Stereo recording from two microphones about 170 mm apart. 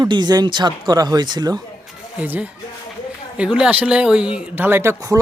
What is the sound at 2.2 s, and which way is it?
Speech, 10° right (ahead or behind).